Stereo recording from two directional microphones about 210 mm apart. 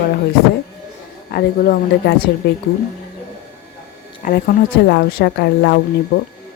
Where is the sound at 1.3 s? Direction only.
45° left (ahead or behind).